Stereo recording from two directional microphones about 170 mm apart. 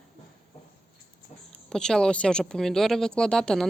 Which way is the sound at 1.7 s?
5° left (ahead or behind).